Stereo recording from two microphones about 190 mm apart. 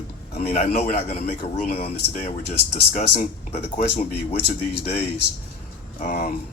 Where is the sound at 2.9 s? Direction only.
45° left (ahead or behind).